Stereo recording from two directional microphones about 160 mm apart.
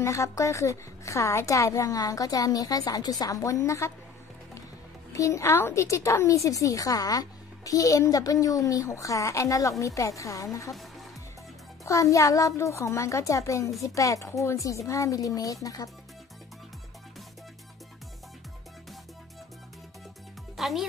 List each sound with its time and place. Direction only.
0.0 s a woman's voice: 20° left (ahead or behind)
5.1 s a woman's voice: 20° left (ahead or behind)
11.8 s a woman's voice: 20° left (ahead or behind)
20.5 s music: centre (ahead or behind)